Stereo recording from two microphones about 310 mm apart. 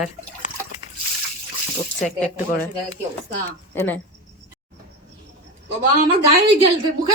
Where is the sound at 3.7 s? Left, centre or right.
Centre.